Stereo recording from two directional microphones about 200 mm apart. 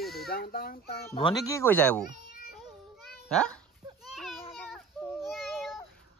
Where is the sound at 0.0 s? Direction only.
Centre (ahead or behind).